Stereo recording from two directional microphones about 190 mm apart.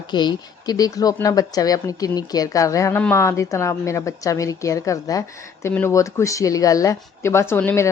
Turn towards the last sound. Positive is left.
turn(degrees=10)  # may be behind; listen again after turning